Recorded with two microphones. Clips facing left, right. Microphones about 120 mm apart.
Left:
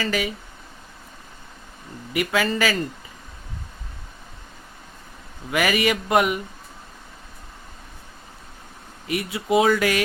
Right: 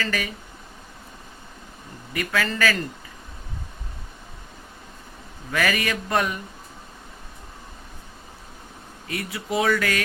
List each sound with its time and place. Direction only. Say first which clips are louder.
0.0 s speech: left 3 dB; 15° left (ahead or behind)
2.1 s speech: left 3 dB; 20° left (ahead or behind)
5.5 s speech: left 3 dB; 15° left (ahead or behind)
9.0 s speech: left 6 dB; 20° left (ahead or behind)